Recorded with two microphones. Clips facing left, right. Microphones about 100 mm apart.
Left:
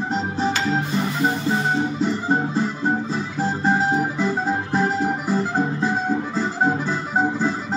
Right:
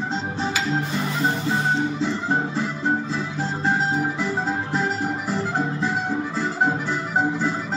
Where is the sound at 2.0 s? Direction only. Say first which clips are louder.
Left 2 dB; 10° left (ahead or behind).